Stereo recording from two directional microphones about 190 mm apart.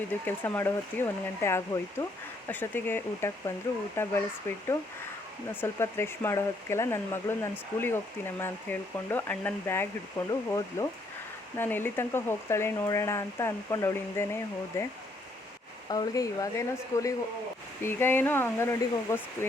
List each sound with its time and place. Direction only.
0.3 s speech: 10° left (ahead or behind)
15.9 s speech: 20° left (ahead or behind)